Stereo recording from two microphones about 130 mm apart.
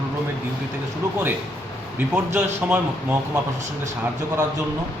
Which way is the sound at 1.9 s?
15° right (ahead or behind).